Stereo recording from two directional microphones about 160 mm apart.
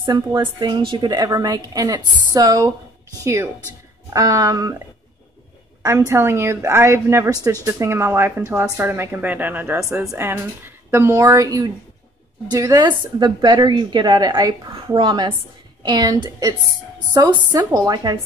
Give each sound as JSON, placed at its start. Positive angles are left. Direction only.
{"t": 0.0, "sound": "a woman's voice", "side_deg": -25}
{"t": 4.1, "sound": "a woman's voice", "side_deg": -20}
{"t": 5.8, "sound": "a woman's voice", "side_deg": -20}